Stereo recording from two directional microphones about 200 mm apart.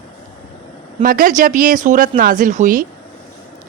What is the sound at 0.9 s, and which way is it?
A man's voice, 45° right (ahead or behind).